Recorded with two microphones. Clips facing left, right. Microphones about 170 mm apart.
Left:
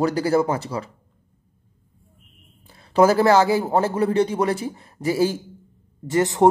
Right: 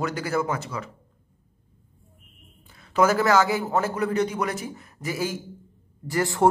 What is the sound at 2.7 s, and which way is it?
Speech, 35° left (ahead or behind).